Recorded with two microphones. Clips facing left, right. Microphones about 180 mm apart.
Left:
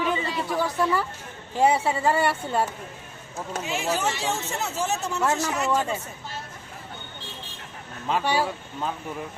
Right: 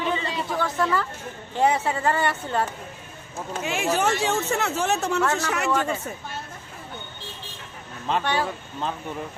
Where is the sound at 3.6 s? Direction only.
60° right (ahead or behind).